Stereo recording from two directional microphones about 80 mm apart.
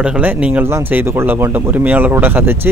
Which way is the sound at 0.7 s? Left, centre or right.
Right.